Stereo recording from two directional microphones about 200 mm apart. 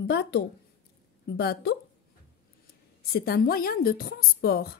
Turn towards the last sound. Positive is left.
turn(degrees=50)  # may be behind; listen again after turning